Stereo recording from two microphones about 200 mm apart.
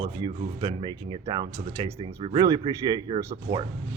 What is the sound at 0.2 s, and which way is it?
Speech, 25° right (ahead or behind).